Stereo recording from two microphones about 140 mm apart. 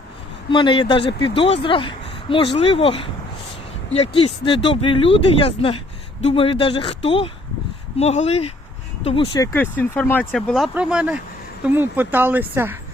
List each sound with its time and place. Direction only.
0.5 s speech: 35° left (ahead or behind)
9.4 s speech: 15° left (ahead or behind)
10.3 s speech: centre (ahead or behind)
10.8 s speech: 10° right (ahead or behind)